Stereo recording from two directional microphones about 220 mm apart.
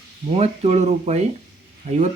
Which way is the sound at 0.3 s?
25° right (ahead or behind).